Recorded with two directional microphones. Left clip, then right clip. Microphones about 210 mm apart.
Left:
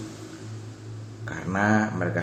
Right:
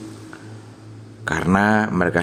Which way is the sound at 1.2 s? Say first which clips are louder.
Right 8 dB; 45° right (ahead or behind).